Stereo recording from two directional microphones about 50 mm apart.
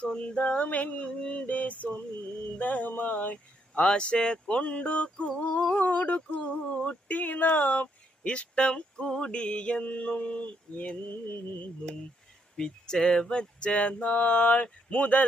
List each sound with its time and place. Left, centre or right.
0.0 s speech: left
2.6 s mantra: left
3.8 s speech: centre
9.8 s mantra: left
12.5 s speech: centre